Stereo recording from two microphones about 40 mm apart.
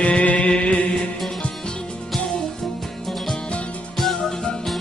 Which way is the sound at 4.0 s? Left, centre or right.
Centre.